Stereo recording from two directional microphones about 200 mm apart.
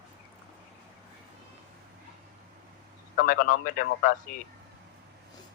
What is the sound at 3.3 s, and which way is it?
Speech, 45° left (ahead or behind).